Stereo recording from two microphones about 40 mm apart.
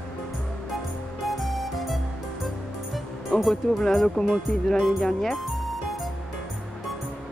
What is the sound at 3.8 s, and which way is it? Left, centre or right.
Speech, centre.